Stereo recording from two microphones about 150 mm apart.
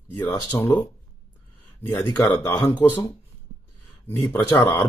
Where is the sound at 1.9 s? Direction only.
30° left (ahead or behind).